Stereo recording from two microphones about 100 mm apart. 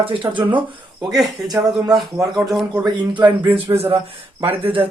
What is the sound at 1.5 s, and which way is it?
Speech, 40° right (ahead or behind).